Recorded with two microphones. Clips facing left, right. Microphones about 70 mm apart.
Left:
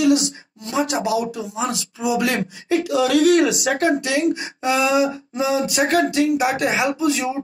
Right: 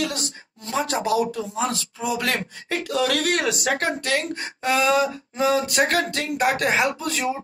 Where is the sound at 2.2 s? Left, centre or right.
Right.